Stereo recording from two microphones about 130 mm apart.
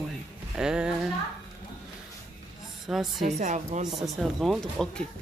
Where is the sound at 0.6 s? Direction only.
5° right (ahead or behind).